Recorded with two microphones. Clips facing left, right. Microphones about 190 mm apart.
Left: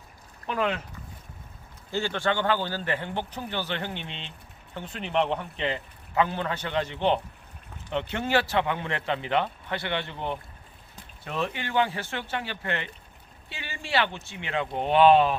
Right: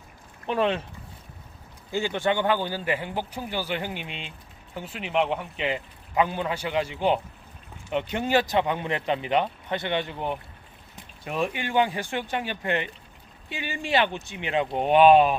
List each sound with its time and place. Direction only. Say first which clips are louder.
0.4 s speech: right 3 dB; 30° right (ahead or behind)
1.9 s a man's voice: right 2 dB; 15° right (ahead or behind)